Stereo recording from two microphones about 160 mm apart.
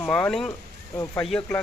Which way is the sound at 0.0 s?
10° left (ahead or behind).